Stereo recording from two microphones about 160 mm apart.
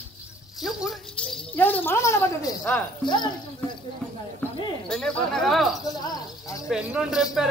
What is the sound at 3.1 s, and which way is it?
Speech, 30° left (ahead or behind).